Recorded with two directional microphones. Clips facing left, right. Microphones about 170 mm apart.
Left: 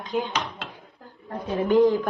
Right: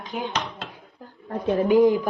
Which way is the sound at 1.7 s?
15° right (ahead or behind).